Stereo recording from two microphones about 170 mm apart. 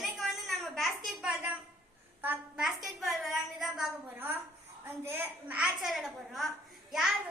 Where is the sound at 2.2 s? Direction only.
5° right (ahead or behind).